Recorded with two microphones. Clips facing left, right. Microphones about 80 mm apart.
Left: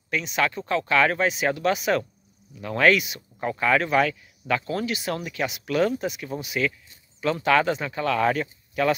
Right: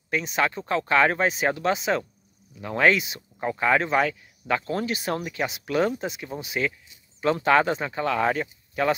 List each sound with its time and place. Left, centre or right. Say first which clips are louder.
0.1 s speech: even; right